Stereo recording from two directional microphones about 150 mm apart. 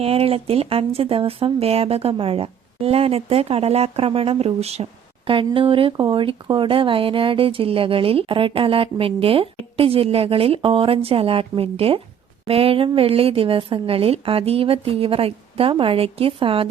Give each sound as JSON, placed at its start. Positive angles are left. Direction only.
{"t": 0.0, "sound": "speech", "side_deg": -40}